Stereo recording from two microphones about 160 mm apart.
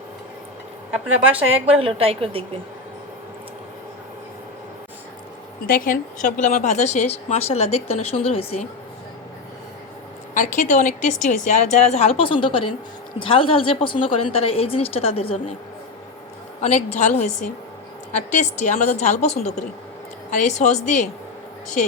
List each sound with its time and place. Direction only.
0.9 s speech: 10° right (ahead or behind)
1.4 s a woman's voice: 35° right (ahead or behind)
5.6 s a woman's voice: 65° left (ahead or behind); by 8.6 s 40° left (ahead or behind)
10.3 s a woman's voice: 55° left (ahead or behind); by 15.4 s 35° left (ahead or behind)
16.6 s a woman's voice: 45° left (ahead or behind)